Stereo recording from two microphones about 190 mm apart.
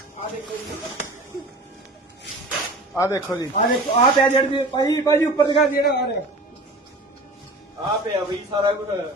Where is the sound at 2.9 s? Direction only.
15° left (ahead or behind).